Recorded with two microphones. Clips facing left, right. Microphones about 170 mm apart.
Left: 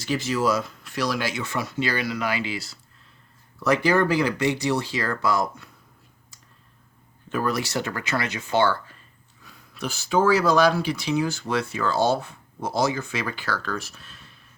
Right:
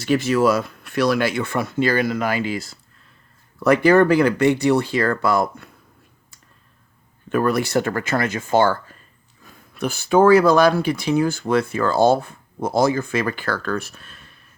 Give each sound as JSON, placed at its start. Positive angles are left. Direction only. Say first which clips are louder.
{"t": 0.0, "sound": "speech", "louder": "right 7 dB", "side_deg": -60}
{"t": 7.3, "sound": "speech", "louder": "right 6 dB", "side_deg": -55}